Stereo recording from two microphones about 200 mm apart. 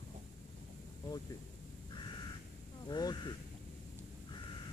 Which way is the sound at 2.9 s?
20° left (ahead or behind).